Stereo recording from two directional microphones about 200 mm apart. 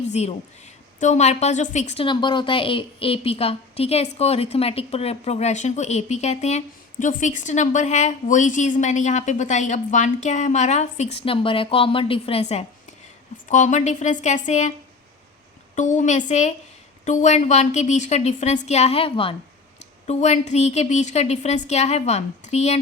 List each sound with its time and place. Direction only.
0.1 s a woman's voice: 35° left (ahead or behind)
15.7 s a woman's voice: 40° left (ahead or behind)